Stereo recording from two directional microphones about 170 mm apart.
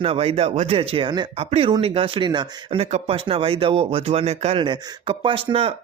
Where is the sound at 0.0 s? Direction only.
35° right (ahead or behind).